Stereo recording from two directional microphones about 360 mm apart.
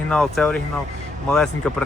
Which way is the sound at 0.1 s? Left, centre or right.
Centre.